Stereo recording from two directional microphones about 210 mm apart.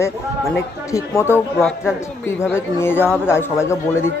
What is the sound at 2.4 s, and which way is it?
Speech, 10° left (ahead or behind).